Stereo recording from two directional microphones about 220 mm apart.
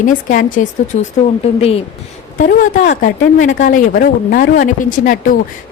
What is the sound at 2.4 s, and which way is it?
A woman's voice, 35° left (ahead or behind).